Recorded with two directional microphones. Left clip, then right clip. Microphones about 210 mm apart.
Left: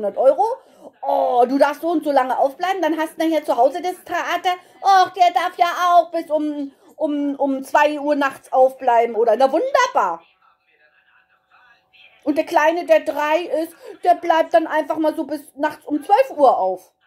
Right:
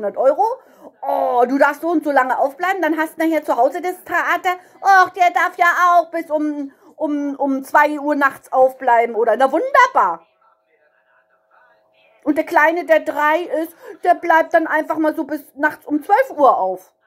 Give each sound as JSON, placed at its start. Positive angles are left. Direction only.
{"t": 0.0, "sound": "a woman's voice", "side_deg": -20}
{"t": 12.2, "sound": "a woman's voice", "side_deg": -20}